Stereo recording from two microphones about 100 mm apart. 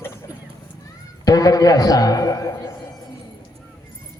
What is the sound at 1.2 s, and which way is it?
A man's voice, 40° left (ahead or behind).